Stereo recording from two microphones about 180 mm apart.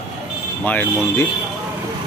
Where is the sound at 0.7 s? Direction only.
10° left (ahead or behind).